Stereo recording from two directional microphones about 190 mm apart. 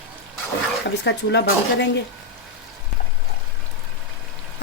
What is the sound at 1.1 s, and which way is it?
Speech, 65° left (ahead or behind).